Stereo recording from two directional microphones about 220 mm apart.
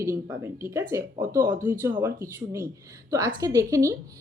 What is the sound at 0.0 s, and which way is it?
A woman's voice, 10° right (ahead or behind).